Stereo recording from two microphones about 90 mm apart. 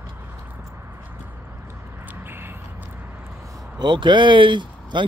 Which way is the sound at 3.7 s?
60° right (ahead or behind).